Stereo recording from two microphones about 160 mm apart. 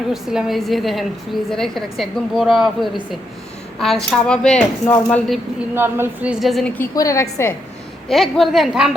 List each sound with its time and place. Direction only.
0.1 s a woman's voice: 5° right (ahead or behind)
5.7 s a woman's voice: 15° right (ahead or behind)
6.4 s a woman's voice: centre (ahead or behind)
6.9 s a woman's voice: 20° left (ahead or behind)
8.0 s a woman's voice: centre (ahead or behind)